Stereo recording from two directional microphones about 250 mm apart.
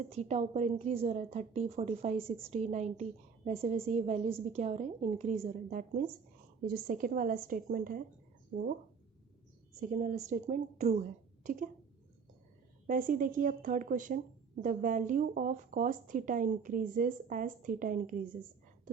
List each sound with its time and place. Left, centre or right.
0.0 s a woman's voice: right
9.8 s a woman's voice: right
12.9 s a woman's voice: right